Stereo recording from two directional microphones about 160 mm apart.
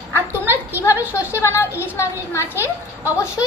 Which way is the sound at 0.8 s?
15° left (ahead or behind).